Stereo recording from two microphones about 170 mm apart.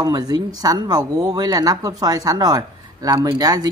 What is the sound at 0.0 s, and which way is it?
Speech, 25° right (ahead or behind).